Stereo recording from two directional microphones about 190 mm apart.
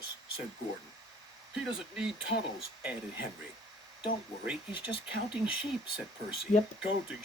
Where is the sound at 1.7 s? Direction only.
5° right (ahead or behind).